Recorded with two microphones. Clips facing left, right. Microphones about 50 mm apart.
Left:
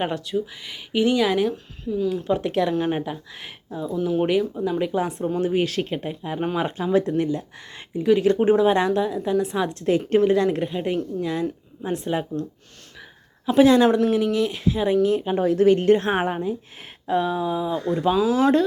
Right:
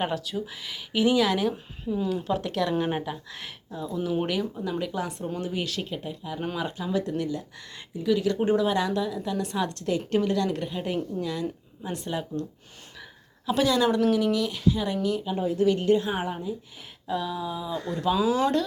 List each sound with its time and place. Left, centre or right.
0.0 s a woman's voice: centre
1.8 s speech: centre
2.1 s a woman's voice: centre
2.4 s speech: centre
2.7 s speech: centre
13.7 s speech: left
13.9 s speech: centre
15.1 s a woman's voice: left
15.4 s speech: left
15.6 s a woman's voice: left
17.1 s speech: left
18.0 s speech: centre